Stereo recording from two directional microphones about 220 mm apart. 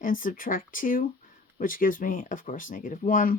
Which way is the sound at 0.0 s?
35° left (ahead or behind).